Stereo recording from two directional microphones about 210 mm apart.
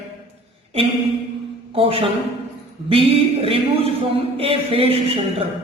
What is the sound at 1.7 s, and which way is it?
Speech, 25° right (ahead or behind).